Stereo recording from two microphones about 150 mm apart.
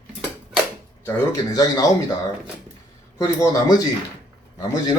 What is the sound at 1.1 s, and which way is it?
Speech, 20° left (ahead or behind).